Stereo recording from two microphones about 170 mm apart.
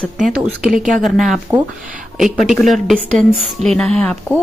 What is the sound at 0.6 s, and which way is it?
A woman's voice, 5° right (ahead or behind).